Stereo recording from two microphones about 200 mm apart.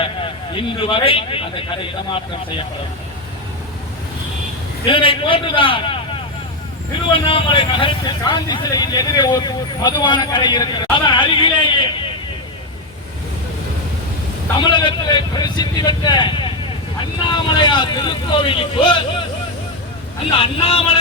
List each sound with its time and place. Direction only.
0.0 s speech: 25° left (ahead or behind)
4.9 s speech: 25° left (ahead or behind)
7.1 s a man's voice: 25° left (ahead or behind)
14.6 s speech: 25° left (ahead or behind)
20.4 s speech: 30° left (ahead or behind)